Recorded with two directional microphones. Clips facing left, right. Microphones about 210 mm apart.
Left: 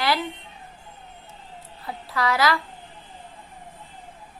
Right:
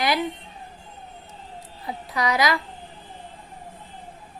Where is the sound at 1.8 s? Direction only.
15° right (ahead or behind).